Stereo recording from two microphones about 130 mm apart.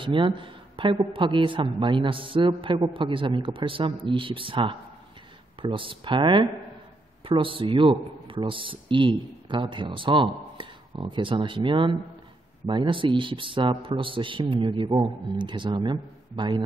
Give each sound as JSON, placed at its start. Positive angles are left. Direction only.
{"t": 0.0, "sound": "a man's voice", "side_deg": -40}